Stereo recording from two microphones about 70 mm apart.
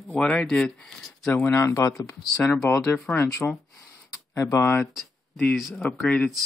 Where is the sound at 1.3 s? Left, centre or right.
Left.